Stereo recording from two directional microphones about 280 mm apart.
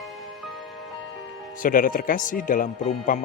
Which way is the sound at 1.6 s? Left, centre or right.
Left.